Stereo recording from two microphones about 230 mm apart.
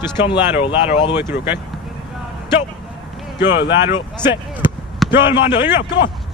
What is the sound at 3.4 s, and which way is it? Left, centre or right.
Speech, left.